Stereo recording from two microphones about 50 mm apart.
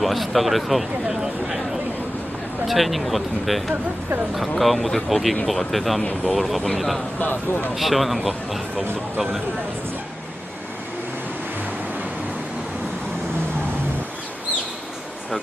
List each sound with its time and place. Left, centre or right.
0.0 s speech: centre
1.0 s a sound: centre
2.7 s speech: centre
7.2 s speech: left
7.7 s speech: centre